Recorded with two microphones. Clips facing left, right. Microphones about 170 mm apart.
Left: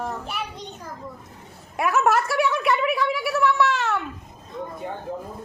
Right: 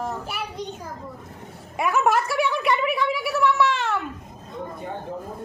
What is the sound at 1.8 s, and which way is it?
A woman's voice, centre (ahead or behind).